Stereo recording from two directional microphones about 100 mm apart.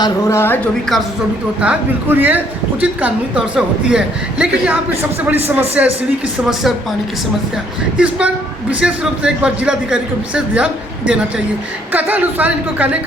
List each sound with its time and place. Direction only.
0.3 s speech: 25° left (ahead or behind)
1.6 s a man's voice: 20° right (ahead or behind)
6.5 s speech: 5° right (ahead or behind)
7.9 s a man's voice: 10° right (ahead or behind)